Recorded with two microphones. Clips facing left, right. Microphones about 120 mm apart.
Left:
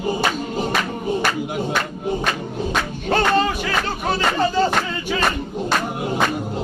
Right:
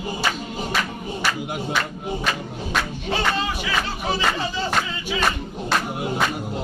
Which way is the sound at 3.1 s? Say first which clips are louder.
Left 6 dB; 50° left (ahead or behind).